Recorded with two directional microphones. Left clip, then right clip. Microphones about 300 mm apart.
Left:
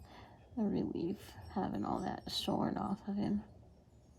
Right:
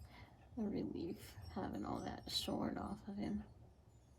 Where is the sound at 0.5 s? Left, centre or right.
Left.